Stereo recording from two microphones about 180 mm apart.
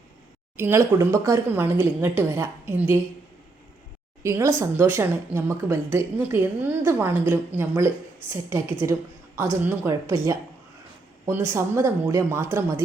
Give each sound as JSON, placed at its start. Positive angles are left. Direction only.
{"t": 0.5, "sound": "speech", "side_deg": -15}
{"t": 4.2, "sound": "a woman's voice", "side_deg": -15}
{"t": 11.5, "sound": "speech", "side_deg": -15}